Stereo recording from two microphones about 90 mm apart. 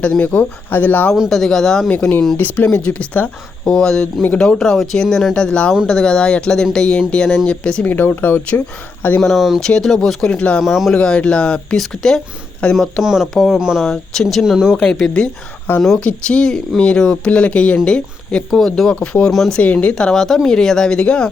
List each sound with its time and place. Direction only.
0.0 s speech: 15° left (ahead or behind)
1.1 s speech: centre (ahead or behind)
1.9 s speech: 15° left (ahead or behind)
4.0 s speech: 15° left (ahead or behind)
7.9 s speech: 20° left (ahead or behind)
9.2 s speech: centre (ahead or behind)
10.6 s speech: 5° right (ahead or behind)
10.9 s speech: 10° left (ahead or behind); by 13.8 s 10° right (ahead or behind)
13.8 s speech: 5° left (ahead or behind)
14.7 s speech: 5° left (ahead or behind)
18.9 s speech: 15° left (ahead or behind)
19.3 s speech: 5° left (ahead or behind)
19.6 s speech: 15° left (ahead or behind)